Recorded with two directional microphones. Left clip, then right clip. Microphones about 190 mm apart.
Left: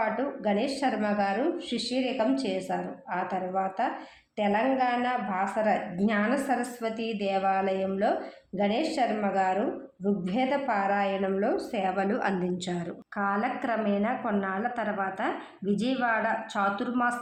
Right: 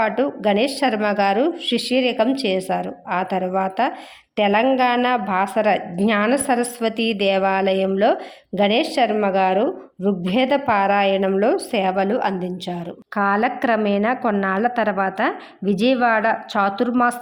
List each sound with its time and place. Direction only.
0.0 s a woman's voice: 40° right (ahead or behind); by 12.8 s 20° right (ahead or behind)
13.1 s a woman's voice: 35° right (ahead or behind)